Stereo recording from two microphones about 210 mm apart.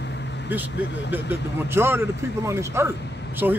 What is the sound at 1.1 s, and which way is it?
A man's voice, 10° right (ahead or behind).